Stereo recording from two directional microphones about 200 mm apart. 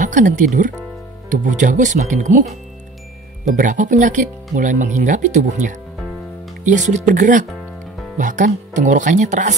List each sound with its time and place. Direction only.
0.0 s speech: 40° right (ahead or behind)